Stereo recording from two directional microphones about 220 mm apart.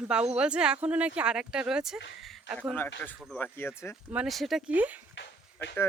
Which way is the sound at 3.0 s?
5° left (ahead or behind).